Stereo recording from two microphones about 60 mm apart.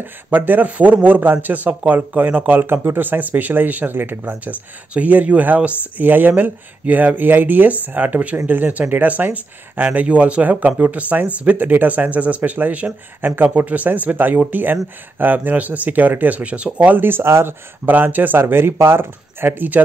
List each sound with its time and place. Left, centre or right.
0.0 s a man's voice: right
16.9 s speech: right